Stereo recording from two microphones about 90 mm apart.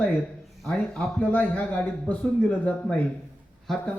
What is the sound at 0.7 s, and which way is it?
Speech, 15° left (ahead or behind).